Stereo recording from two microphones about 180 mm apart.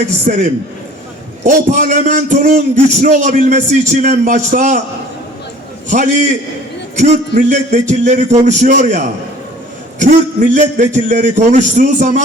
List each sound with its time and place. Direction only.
0.3 s a man's voice: 45° right (ahead or behind)
1.5 s a man's voice: 45° right (ahead or behind)
5.9 s a man's voice: 45° right (ahead or behind)